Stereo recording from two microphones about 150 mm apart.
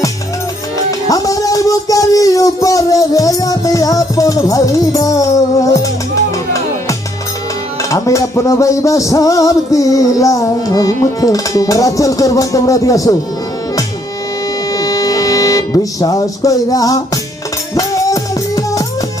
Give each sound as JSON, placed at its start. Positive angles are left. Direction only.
{"t": 0.9, "sound": "music", "side_deg": 25}
{"t": 7.8, "sound": "music", "side_deg": 20}
{"t": 14.7, "sound": "music", "side_deg": 25}